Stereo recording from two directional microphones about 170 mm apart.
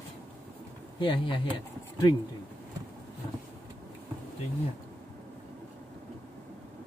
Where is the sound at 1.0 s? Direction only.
30° left (ahead or behind).